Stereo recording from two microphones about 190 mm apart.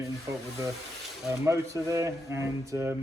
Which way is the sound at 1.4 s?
15° right (ahead or behind).